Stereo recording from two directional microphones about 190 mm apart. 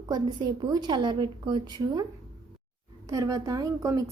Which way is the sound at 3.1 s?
20° right (ahead or behind).